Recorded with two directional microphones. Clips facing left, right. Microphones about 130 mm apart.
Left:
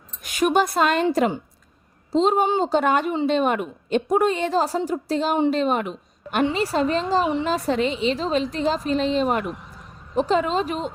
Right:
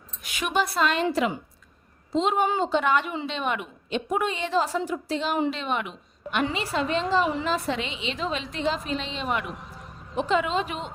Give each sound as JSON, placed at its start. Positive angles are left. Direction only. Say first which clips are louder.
{"t": 0.2, "sound": "speech", "louder": "left 7 dB", "side_deg": 45}
{"t": 2.1, "sound": "a woman's voice", "louder": "left 4 dB", "side_deg": 35}